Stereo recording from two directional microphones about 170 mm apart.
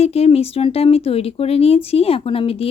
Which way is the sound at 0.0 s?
35° left (ahead or behind).